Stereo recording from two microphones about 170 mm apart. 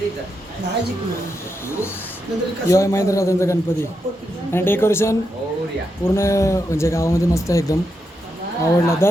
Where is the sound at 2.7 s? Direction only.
20° left (ahead or behind).